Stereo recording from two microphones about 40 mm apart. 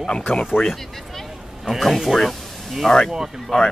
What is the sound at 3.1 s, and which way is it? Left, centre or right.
Speech, centre.